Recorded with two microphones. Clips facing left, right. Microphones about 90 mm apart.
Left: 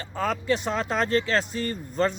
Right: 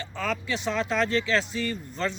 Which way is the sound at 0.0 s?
40° left (ahead or behind).